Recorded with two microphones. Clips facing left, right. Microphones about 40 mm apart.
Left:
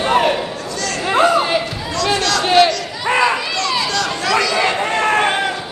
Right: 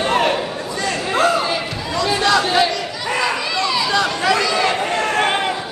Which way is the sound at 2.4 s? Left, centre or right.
Left.